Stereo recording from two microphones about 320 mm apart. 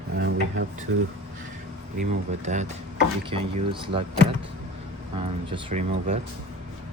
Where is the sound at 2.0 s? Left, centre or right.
Right.